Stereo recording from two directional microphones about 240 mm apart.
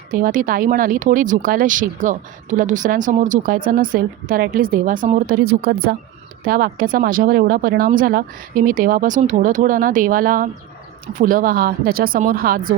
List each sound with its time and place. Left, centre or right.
0.1 s speech: right